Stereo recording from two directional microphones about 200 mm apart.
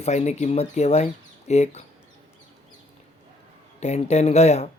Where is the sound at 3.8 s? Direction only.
35° left (ahead or behind).